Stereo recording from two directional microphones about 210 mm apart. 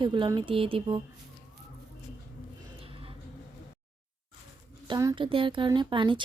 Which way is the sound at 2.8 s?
25° right (ahead or behind).